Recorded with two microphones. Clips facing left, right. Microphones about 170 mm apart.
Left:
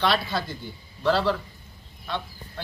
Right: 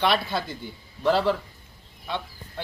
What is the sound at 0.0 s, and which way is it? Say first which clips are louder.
A man's voice: right 1 dB; 20° right (ahead or behind).